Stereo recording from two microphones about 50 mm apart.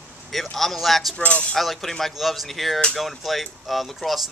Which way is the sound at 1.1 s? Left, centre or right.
Left.